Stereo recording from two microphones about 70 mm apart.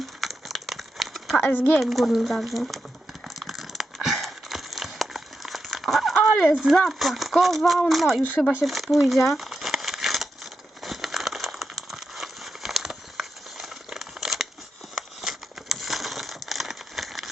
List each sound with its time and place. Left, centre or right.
0.2 s crumpling: centre
1.4 s speech: left
1.8 s speech: centre
3.4 s a sound: centre
6.7 s speech: centre
9.4 s crumpling: centre
14.9 s a sound: centre